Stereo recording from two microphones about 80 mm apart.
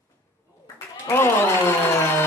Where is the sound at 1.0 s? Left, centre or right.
Left.